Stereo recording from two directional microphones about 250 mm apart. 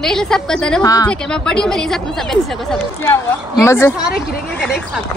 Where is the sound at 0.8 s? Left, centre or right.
Centre.